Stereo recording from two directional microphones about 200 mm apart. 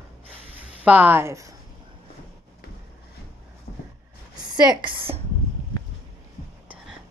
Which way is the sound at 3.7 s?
50° left (ahead or behind).